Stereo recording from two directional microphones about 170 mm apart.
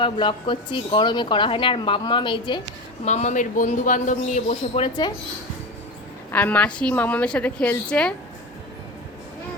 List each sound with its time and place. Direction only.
0.0 s speech: 30° left (ahead or behind)
3.0 s a man's voice: 40° left (ahead or behind)
6.3 s speech: 10° left (ahead or behind)